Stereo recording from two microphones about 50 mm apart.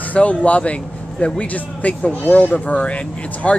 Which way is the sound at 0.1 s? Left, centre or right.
Left.